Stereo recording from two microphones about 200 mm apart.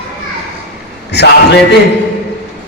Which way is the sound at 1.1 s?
55° left (ahead or behind).